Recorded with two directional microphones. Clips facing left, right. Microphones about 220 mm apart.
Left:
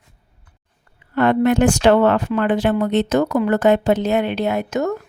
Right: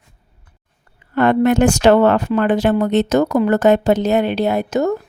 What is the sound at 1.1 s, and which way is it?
Speech, 45° right (ahead or behind).